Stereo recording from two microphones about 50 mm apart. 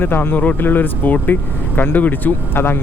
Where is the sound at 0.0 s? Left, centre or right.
Left.